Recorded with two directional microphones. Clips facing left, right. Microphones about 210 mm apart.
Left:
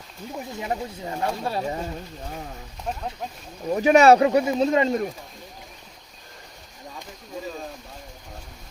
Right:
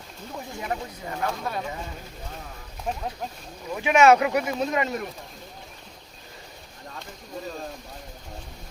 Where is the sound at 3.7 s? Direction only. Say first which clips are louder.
Left 3 dB; 40° left (ahead or behind).